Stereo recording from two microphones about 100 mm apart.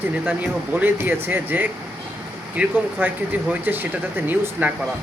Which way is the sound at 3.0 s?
20° right (ahead or behind).